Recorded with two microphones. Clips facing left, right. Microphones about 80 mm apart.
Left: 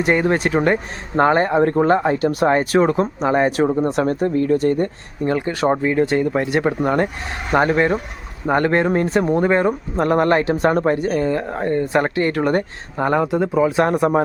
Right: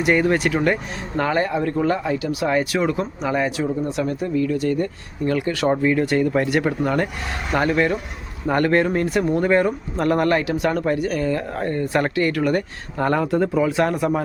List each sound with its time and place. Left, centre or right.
0.0 s speech: left
8.4 s speech: left
13.0 s speech: centre